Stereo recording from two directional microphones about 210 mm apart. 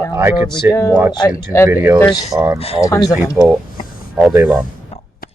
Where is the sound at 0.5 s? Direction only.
15° left (ahead or behind).